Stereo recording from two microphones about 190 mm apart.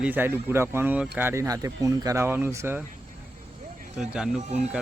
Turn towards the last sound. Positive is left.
turn(degrees=-35)  # may be behind; listen again after turning